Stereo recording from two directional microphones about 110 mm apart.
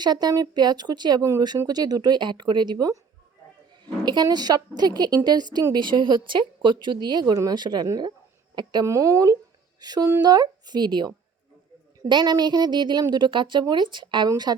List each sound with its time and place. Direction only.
0.0 s a woman's voice: 40° right (ahead or behind)
4.0 s a woman's voice: 40° right (ahead or behind)
8.9 s a woman's voice: 30° right (ahead or behind)